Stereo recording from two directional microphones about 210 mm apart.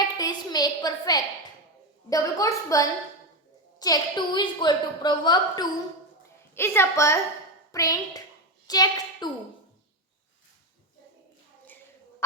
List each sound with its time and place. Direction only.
0.0 s a woman's voice: 20° left (ahead or behind)